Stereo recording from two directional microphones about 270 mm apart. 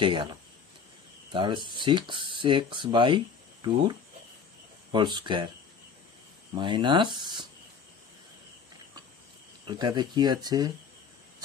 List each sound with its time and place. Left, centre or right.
0.0 s speech: centre
4.9 s speech: centre
6.5 s speech: centre
9.7 s speech: centre